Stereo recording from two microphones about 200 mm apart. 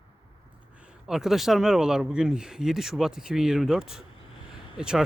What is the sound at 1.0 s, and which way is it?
Speech, centre (ahead or behind).